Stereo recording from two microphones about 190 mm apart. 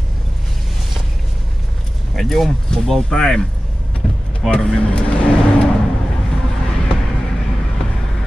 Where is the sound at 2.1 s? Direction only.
Centre (ahead or behind).